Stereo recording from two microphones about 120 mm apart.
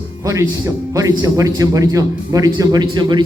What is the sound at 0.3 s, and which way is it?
A man's voice, 25° right (ahead or behind).